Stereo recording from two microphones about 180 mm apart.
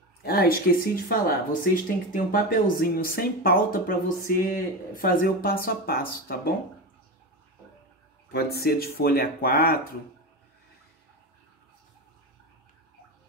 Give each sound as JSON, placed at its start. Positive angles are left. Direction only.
{"t": 0.2, "sound": "speech", "side_deg": 60}
{"t": 8.3, "sound": "speech", "side_deg": 60}